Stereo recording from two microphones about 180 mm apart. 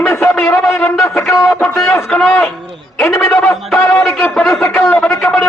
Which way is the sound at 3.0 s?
15° left (ahead or behind).